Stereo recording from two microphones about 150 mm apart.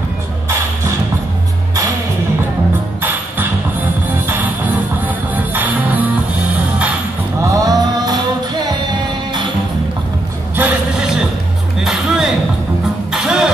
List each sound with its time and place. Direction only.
3.0 s music: 15° right (ahead or behind)
7.4 s music: 25° right (ahead or behind)
10.5 s music: 10° right (ahead or behind)
11.8 s music: centre (ahead or behind)